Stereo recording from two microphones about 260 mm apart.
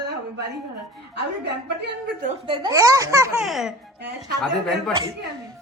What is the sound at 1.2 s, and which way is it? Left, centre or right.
A woman's voice, right.